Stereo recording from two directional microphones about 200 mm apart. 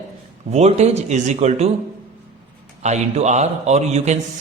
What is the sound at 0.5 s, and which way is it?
Speech, 35° right (ahead or behind).